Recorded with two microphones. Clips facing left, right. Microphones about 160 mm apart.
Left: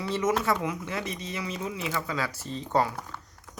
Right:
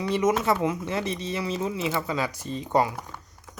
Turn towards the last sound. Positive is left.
turn(degrees=-15)  # may be behind; listen again after turning